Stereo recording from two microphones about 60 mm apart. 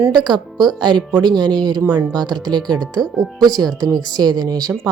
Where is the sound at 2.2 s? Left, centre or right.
Right.